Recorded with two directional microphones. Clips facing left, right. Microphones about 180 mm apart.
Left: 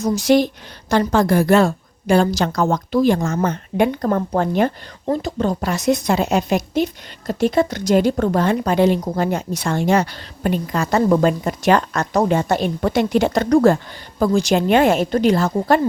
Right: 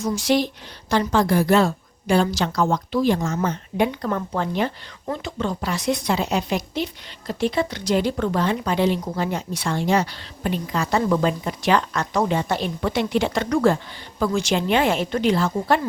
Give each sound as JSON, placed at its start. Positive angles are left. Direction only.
{"t": 0.0, "sound": "a woman's voice", "side_deg": 45}